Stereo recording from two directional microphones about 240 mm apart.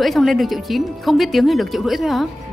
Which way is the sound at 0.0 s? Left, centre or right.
Centre.